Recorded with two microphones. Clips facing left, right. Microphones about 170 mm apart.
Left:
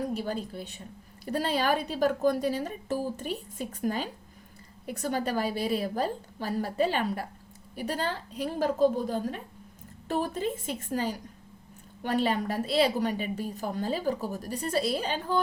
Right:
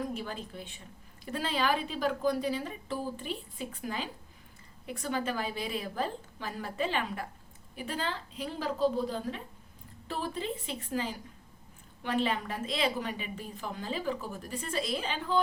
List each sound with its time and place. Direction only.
0.0 s a woman's voice: 35° left (ahead or behind)